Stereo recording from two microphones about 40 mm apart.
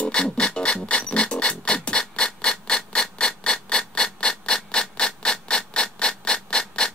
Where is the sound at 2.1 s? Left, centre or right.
Left.